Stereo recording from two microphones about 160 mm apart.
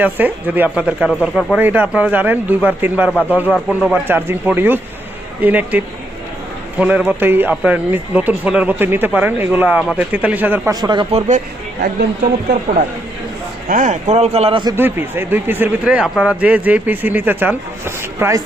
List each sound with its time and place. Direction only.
0.0 s speech: 10° right (ahead or behind)
3.1 s speech: 10° left (ahead or behind)
3.7 s speech: 5° right (ahead or behind)
10.8 s speech: 25° right (ahead or behind)
11.1 s speech: 50° right (ahead or behind)
11.8 s speech: 75° right (ahead or behind)
13.7 s speech: 50° right (ahead or behind)
14.8 s speech: 15° right (ahead or behind)